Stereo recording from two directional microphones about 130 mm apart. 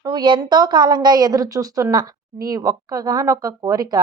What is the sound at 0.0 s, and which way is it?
A woman's voice, 35° right (ahead or behind).